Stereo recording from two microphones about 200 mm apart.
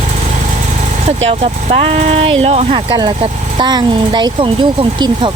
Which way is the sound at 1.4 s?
35° right (ahead or behind).